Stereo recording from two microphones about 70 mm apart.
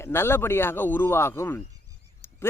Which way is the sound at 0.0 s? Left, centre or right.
Left.